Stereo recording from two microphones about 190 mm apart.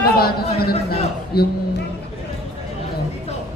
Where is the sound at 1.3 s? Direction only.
55° left (ahead or behind).